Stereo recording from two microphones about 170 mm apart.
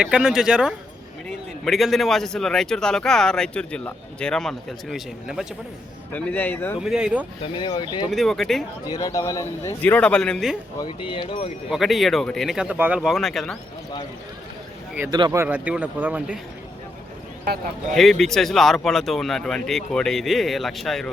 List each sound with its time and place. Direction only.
0.0 s a man's voice: 5° right (ahead or behind)
6.1 s a man's voice: 10° left (ahead or behind)
6.8 s a man's voice: 5° right (ahead or behind)
7.4 s speech: 30° left (ahead or behind)
8.1 s a man's voice: centre (ahead or behind)
8.9 s a man's voice: 20° left (ahead or behind); by 10.6 s centre (ahead or behind)
11.1 s speech: 30° left (ahead or behind)
11.7 s a man's voice: centre (ahead or behind)
15.1 s speech: 20° right (ahead or behind)
17.4 s speech: 55° right (ahead or behind)
17.9 s a man's voice: centre (ahead or behind)